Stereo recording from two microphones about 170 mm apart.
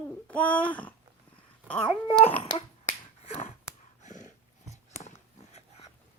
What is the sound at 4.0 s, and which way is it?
Dog, 45° left (ahead or behind).